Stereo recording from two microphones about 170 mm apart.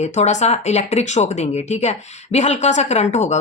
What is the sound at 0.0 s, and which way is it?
Speech, 45° left (ahead or behind).